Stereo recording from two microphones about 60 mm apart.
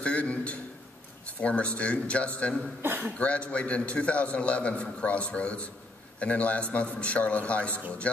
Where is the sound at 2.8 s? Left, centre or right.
Right.